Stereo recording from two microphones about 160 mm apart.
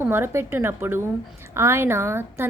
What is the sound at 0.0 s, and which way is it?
A woman's voice, 15° right (ahead or behind).